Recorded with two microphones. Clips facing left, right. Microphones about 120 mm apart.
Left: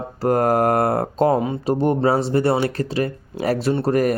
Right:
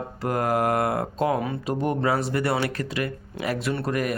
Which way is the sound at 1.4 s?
25° left (ahead or behind).